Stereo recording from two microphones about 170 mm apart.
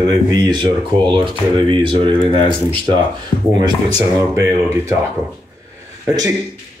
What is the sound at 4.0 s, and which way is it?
Speech, 15° right (ahead or behind).